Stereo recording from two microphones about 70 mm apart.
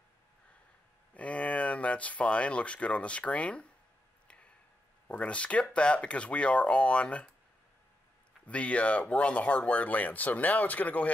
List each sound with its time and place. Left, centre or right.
1.1 s speech: centre
5.0 s speech: left
8.5 s speech: centre